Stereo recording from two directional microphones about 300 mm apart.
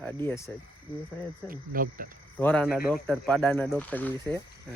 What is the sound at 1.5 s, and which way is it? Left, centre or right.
Speech, right.